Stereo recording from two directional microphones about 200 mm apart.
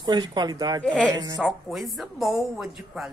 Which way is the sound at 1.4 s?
Centre (ahead or behind).